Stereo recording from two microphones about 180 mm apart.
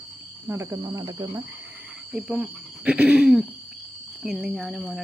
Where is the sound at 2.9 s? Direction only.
5° right (ahead or behind).